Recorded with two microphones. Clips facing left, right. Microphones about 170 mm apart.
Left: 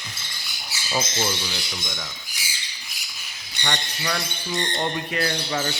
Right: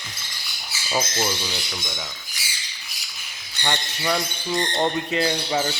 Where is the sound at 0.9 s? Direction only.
5° right (ahead or behind).